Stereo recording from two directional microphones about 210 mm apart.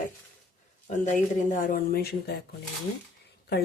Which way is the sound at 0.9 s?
35° left (ahead or behind).